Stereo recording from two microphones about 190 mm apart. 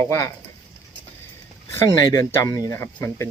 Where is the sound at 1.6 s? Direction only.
15° left (ahead or behind).